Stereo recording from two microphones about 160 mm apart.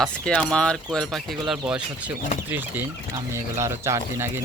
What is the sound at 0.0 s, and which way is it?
Speech, 5° left (ahead or behind).